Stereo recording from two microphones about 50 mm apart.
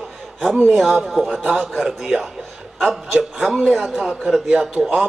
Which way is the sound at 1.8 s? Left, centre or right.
Centre.